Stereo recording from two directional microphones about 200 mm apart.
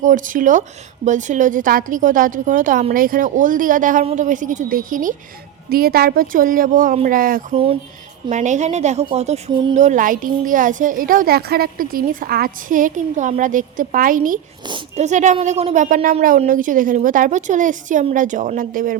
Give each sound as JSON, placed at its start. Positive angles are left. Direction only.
{"t": 0.0, "sound": "a woman's voice", "side_deg": -40}
{"t": 7.5, "sound": "a woman's voice", "side_deg": -30}